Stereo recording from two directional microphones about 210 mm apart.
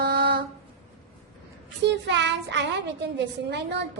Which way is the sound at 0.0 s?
50° right (ahead or behind).